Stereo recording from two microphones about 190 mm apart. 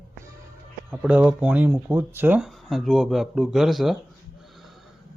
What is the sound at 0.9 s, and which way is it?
Speech, 5° right (ahead or behind).